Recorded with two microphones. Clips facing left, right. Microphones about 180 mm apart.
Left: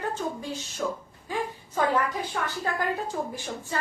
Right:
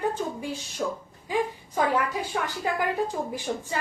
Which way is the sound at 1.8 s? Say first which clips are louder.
Even; 10° right (ahead or behind).